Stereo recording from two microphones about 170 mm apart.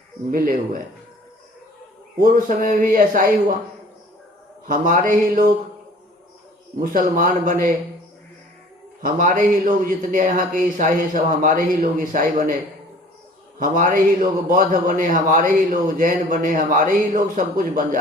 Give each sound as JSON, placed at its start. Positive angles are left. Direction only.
{"t": 0.3, "sound": "a man's voice", "side_deg": -55}
{"t": 2.2, "sound": "a man's voice", "side_deg": -55}
{"t": 4.6, "sound": "a man's voice", "side_deg": -50}
{"t": 6.7, "sound": "a man's voice", "side_deg": -55}
{"t": 9.0, "sound": "a man's voice", "side_deg": -55}
{"t": 13.6, "sound": "a man's voice", "side_deg": -55}